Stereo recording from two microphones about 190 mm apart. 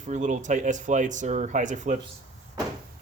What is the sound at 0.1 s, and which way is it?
Speech, 40° right (ahead or behind).